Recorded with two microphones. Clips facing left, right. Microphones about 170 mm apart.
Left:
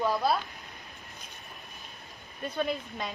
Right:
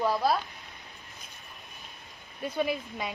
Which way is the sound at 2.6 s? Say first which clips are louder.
Right 1 dB; 10° right (ahead or behind).